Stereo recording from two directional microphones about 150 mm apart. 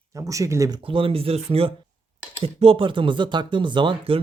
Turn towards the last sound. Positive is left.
turn(degrees=-30)  # may be behind; listen again after turning